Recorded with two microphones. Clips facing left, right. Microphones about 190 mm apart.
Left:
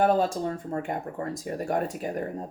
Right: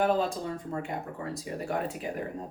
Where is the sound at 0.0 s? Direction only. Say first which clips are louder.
Left 4 dB; 40° left (ahead or behind).